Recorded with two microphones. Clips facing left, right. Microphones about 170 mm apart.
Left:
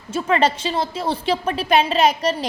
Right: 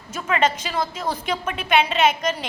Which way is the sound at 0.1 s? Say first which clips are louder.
Left 3 dB; 30° left (ahead or behind).